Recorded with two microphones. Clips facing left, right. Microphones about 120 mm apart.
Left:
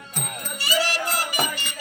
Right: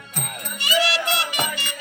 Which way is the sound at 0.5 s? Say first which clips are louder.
Right 3 dB; 40° left (ahead or behind).